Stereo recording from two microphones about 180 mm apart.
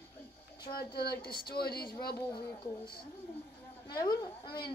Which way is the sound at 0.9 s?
60° left (ahead or behind).